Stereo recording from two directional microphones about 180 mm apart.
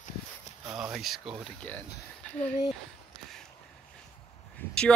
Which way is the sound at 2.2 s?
5° left (ahead or behind).